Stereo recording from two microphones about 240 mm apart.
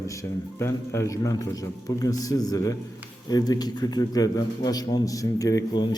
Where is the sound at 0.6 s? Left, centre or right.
Centre.